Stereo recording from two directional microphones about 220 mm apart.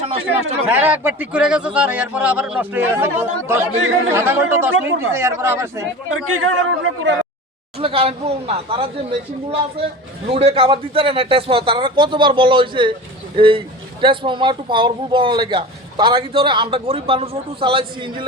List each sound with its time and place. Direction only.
0.0 s a sound: 30° right (ahead or behind)
0.7 s speech: 10° right (ahead or behind)
6.1 s speech: 70° right (ahead or behind)
7.8 s speech: 25° right (ahead or behind)